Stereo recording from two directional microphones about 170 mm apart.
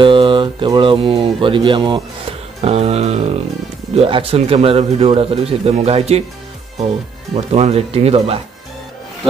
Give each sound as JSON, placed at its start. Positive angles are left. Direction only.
{"t": 0.0, "sound": "speech", "side_deg": -30}
{"t": 7.3, "sound": "speech", "side_deg": -40}